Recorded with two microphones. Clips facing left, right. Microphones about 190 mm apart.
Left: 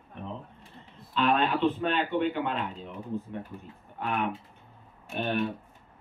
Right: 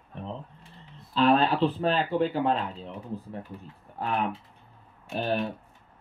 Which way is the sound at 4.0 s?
35° right (ahead or behind).